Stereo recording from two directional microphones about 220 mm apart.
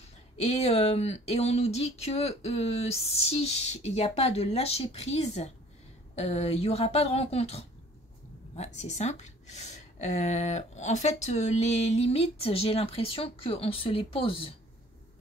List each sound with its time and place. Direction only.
0.4 s a woman's voice: 30° left (ahead or behind)